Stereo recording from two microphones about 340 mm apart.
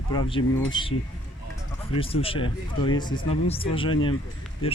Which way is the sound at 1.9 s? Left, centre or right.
Centre.